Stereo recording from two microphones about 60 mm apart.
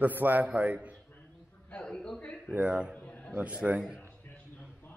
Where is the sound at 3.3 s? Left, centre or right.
Right.